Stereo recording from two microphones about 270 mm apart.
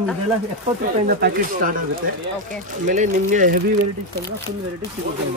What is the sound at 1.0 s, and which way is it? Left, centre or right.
Speech, right.